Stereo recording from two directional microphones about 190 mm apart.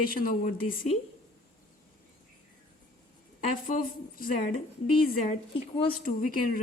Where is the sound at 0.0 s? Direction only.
50° left (ahead or behind).